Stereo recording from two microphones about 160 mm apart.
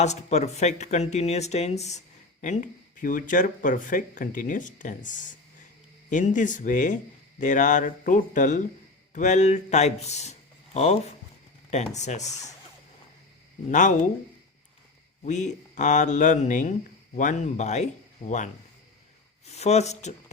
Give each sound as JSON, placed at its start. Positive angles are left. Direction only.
{"t": 0.0, "sound": "speech", "side_deg": 45}
{"t": 13.7, "sound": "speech", "side_deg": 50}
{"t": 15.2, "sound": "speech", "side_deg": 50}